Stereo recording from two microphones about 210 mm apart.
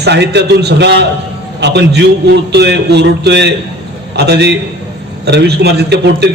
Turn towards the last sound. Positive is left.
turn(degrees=-50)  # may be behind; listen again after turning